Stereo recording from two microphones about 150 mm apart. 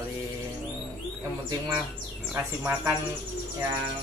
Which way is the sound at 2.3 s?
15° right (ahead or behind).